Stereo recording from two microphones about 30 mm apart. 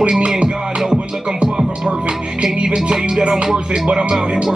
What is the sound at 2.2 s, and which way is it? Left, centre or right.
Music, right.